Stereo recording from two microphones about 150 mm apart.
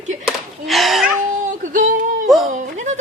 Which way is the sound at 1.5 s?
60° right (ahead or behind).